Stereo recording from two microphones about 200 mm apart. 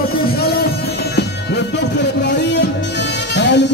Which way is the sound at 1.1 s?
60° left (ahead or behind).